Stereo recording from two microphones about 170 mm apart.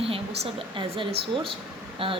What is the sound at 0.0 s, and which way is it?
A woman's voice, 35° right (ahead or behind).